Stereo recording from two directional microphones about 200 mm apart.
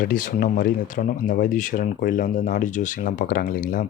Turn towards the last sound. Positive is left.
turn(degrees=40)  # may be behind; listen again after turning